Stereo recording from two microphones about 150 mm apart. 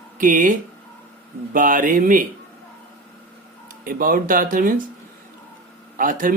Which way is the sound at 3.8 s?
70° right (ahead or behind).